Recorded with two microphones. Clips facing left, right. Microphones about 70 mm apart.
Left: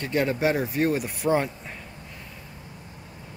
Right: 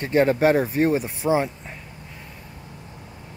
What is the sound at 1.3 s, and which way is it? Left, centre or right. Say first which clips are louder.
Speech: right 3 dB; centre.